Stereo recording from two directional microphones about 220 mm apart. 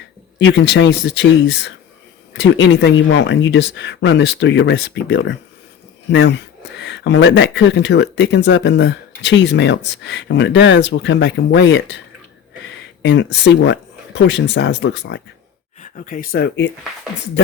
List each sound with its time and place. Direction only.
0.3 s speech: 55° left (ahead or behind)
13.0 s speech: 55° left (ahead or behind)
15.8 s speech: 40° left (ahead or behind)